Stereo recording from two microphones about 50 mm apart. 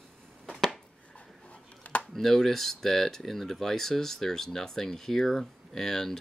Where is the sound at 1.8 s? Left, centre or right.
Left.